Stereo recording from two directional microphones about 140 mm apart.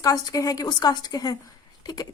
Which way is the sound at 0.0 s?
25° left (ahead or behind).